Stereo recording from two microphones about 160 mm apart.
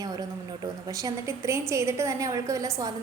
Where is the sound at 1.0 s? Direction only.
20° right (ahead or behind).